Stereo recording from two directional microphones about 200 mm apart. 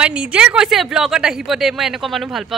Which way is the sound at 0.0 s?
5° right (ahead or behind).